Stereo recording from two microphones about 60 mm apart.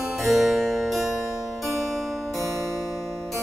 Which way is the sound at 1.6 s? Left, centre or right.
Centre.